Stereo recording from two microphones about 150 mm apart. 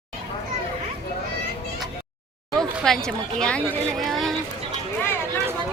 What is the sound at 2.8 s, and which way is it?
Speech, 5° left (ahead or behind).